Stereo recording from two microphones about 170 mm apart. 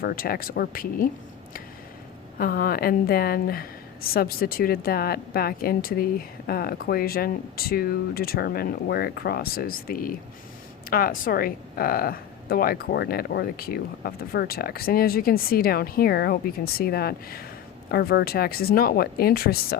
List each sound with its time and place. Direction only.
0.0 s a woman's voice: 60° left (ahead or behind)
2.4 s a woman's voice: 60° left (ahead or behind)